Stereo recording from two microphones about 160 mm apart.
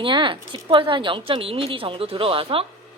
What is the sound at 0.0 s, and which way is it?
Speech, 30° right (ahead or behind).